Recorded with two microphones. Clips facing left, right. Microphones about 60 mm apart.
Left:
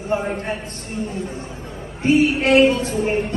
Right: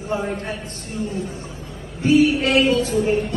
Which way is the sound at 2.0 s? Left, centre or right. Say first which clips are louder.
Even; left.